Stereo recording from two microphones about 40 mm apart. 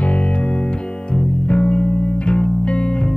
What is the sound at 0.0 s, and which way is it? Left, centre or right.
Music, left.